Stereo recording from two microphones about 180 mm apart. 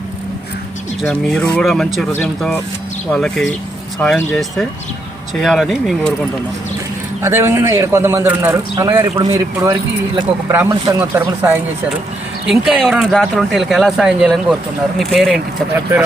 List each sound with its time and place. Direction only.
1.0 s speech: 5° left (ahead or behind)
5.3 s speech: centre (ahead or behind)
7.2 s a man's voice: 15° right (ahead or behind); by 15.4 s centre (ahead or behind)
15.7 s a man's voice: 10° right (ahead or behind)